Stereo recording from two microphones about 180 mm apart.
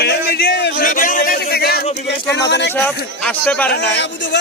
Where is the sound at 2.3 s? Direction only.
70° left (ahead or behind).